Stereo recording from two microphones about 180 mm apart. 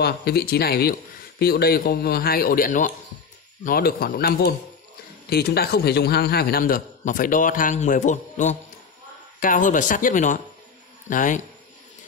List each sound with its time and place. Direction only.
0.0 s a man's voice: 60° left (ahead or behind); by 11.4 s 45° left (ahead or behind)